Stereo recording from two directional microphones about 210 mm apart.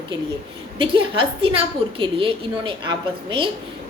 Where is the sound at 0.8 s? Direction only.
25° right (ahead or behind).